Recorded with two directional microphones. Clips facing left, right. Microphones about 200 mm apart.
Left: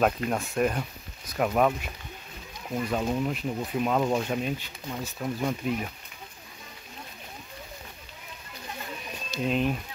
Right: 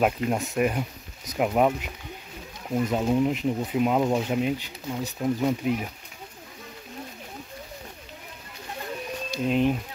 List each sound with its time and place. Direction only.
0.0 s speech: 15° right (ahead or behind)
9.3 s speech: 15° right (ahead or behind)